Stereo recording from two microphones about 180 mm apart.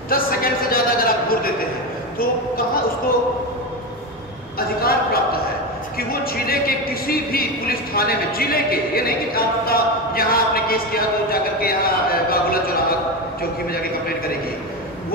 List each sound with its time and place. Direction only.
0.1 s a sound: 55° left (ahead or behind)
2.1 s a man's voice: 55° left (ahead or behind)
4.6 s a man's voice: 55° left (ahead or behind)